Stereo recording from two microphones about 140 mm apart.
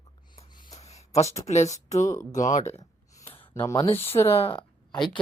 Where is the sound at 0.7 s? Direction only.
50° left (ahead or behind).